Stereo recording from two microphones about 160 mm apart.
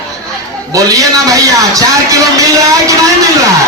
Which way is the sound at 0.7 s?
20° right (ahead or behind).